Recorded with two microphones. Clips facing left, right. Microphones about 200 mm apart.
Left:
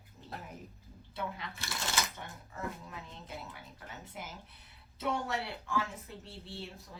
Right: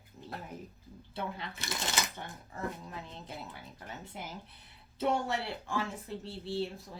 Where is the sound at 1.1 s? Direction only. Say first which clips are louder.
Right 1 dB; 30° right (ahead or behind).